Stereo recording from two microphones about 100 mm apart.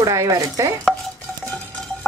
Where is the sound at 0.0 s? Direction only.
30° right (ahead or behind).